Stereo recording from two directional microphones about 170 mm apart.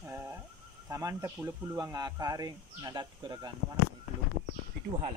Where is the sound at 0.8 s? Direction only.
15° right (ahead or behind).